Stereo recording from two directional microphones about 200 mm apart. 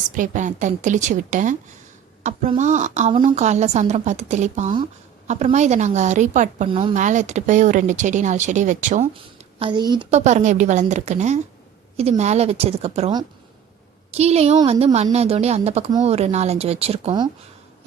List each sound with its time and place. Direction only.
0.1 s speech: 40° right (ahead or behind)
6.7 s speech: 25° right (ahead or behind)
6.9 s speech: 35° right (ahead or behind)
9.1 s a woman's voice: 25° right (ahead or behind)
10.1 s speech: 35° right (ahead or behind)